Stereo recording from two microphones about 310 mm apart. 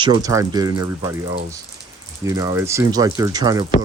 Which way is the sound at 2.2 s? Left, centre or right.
Centre.